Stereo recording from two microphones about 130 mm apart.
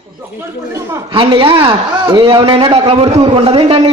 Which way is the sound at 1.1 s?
40° right (ahead or behind).